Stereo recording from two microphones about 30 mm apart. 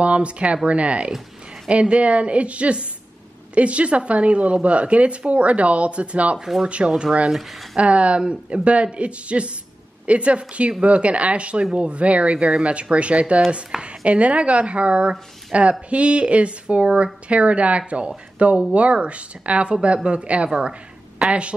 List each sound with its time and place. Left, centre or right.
0.0 s speech: right
6.9 s speech: right
7.7 s speech: right